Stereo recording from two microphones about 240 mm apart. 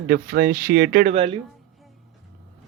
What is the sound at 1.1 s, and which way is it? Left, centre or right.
Speech, right.